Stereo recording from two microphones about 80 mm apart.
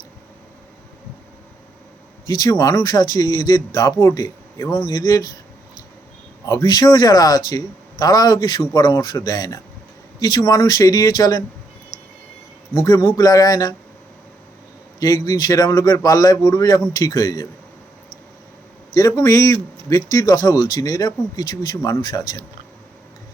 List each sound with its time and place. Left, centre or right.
2.2 s speech: left
4.9 s speech: left
6.4 s speech: left
6.7 s speech: left
12.7 s speech: left
14.9 s speech: left
18.9 s speech: left